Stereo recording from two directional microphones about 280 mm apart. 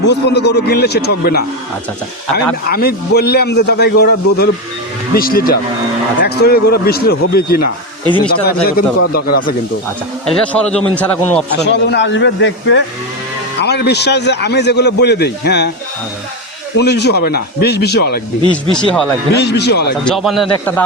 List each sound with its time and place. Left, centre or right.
0.0 s a man's voice: left
2.6 s a man's voice: left
10.2 s a man's voice: centre
11.6 s a man's voice: left
16.7 s a man's voice: left
18.7 s a man's voice: centre
19.3 s a man's voice: left
20.1 s a man's voice: centre